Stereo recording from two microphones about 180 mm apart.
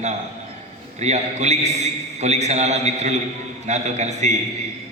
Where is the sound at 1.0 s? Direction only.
40° right (ahead or behind).